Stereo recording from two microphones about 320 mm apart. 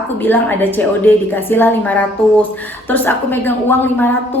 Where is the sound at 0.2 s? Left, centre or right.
Centre.